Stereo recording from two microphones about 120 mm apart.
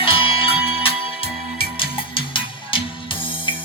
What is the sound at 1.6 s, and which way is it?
Music, 45° left (ahead or behind).